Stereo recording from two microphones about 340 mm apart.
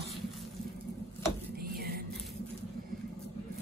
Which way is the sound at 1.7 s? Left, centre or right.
Right.